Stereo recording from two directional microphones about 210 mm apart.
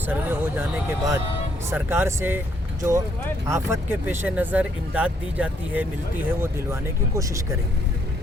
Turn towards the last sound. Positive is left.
turn(degrees=-15)  # may be behind; listen again after turning